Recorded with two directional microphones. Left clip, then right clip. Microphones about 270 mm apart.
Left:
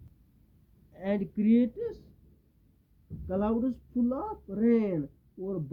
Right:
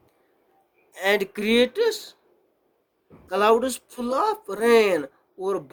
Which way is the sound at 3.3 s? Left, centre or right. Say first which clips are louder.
Right 11 dB; right.